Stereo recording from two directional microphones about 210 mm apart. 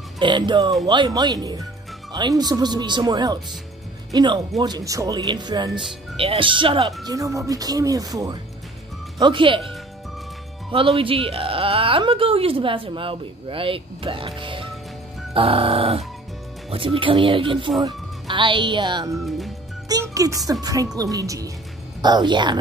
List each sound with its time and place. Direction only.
0.2 s speech: 20° right (ahead or behind)
10.7 s speech: 25° right (ahead or behind)
19.1 s speech: centre (ahead or behind)
19.9 s music: 15° right (ahead or behind)
20.6 s speech: 15° right (ahead or behind)